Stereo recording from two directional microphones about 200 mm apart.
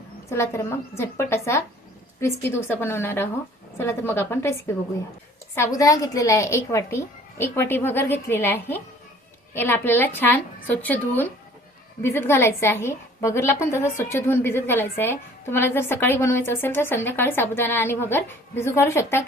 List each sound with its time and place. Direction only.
0.3 s a woman's voice: 15° left (ahead or behind)
5.5 s a woman's voice: 15° left (ahead or behind)